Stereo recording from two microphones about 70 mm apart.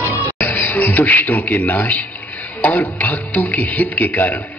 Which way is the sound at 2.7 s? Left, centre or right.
Left.